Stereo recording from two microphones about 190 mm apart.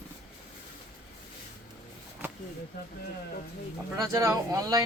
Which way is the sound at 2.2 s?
10° right (ahead or behind).